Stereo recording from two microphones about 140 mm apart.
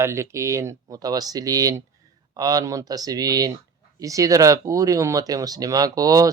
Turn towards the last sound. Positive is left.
turn(degrees=-25)  # may be behind; listen again after turning